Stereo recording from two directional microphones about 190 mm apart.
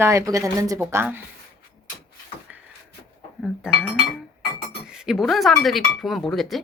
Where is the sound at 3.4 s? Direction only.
Centre (ahead or behind).